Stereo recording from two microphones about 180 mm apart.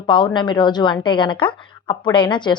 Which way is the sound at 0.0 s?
25° left (ahead or behind).